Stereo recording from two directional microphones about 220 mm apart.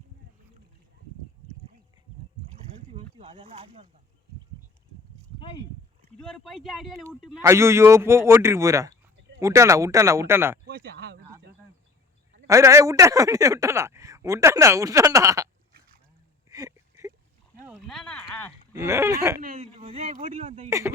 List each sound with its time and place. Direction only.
2.9 s speech: 25° right (ahead or behind)
5.4 s speech: 20° left (ahead or behind)
6.1 s speech: 5° left (ahead or behind)
7.4 s a man's voice: 10° right (ahead or behind)
10.7 s a sound: 45° right (ahead or behind)
12.5 s a man's voice: 15° right (ahead or behind)
16.5 s a sound: 15° right (ahead or behind)
17.7 s speech: centre (ahead or behind)
18.8 s a man's voice: 10° right (ahead or behind)
19.5 s speech: 25° right (ahead or behind)
20.7 s a man's voice: 15° right (ahead or behind)